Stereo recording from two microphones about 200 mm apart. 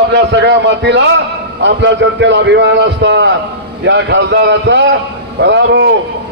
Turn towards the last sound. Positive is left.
turn(degrees=-60)  # may be behind; listen again after turning